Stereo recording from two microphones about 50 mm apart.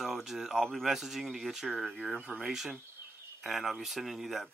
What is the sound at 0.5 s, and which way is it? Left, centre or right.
Speech, centre.